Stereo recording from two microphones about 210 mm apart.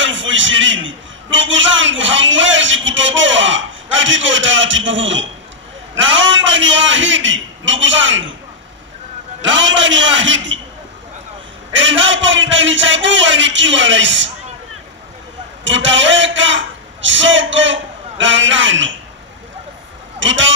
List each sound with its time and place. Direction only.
0.0 s a man's voice: 60° right (ahead or behind)
9.4 s a man's voice: 60° right (ahead or behind)
11.7 s a man's voice: 65° right (ahead or behind)
15.6 s a man's voice: 60° right (ahead or behind)
20.2 s speech: 60° right (ahead or behind)